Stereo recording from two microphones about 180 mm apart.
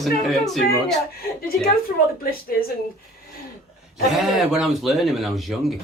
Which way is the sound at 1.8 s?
55° left (ahead or behind).